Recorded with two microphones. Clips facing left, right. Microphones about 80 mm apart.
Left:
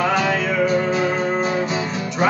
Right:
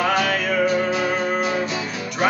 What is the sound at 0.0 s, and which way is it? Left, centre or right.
Music, left.